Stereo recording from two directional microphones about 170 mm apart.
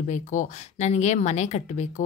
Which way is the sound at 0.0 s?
45° left (ahead or behind).